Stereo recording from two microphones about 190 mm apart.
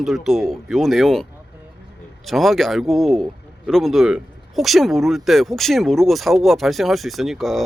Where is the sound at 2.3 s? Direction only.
Centre (ahead or behind).